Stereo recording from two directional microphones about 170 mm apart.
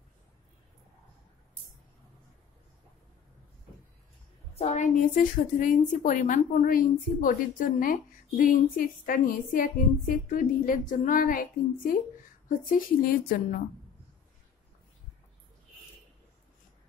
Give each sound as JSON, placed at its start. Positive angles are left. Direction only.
{"t": 4.6, "sound": "a woman's voice", "side_deg": 45}